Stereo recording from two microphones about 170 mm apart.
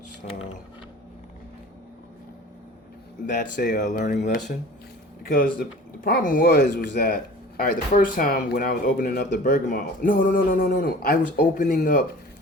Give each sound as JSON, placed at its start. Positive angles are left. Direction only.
{"t": 3.2, "sound": "speech", "side_deg": 50}
{"t": 5.2, "sound": "speech", "side_deg": 55}